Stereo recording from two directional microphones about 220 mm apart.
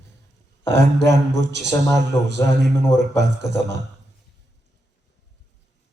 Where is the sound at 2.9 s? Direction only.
50° right (ahead or behind).